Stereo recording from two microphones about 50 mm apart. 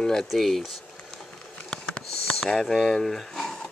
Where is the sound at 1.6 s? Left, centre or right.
Centre.